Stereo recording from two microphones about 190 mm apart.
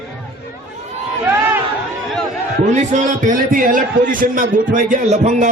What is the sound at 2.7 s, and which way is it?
A man's voice, 40° right (ahead or behind).